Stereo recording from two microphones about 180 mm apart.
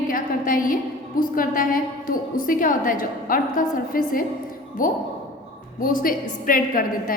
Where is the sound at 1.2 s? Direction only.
50° left (ahead or behind).